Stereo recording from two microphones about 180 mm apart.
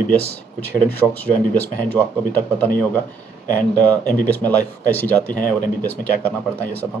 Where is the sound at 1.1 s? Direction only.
10° left (ahead or behind).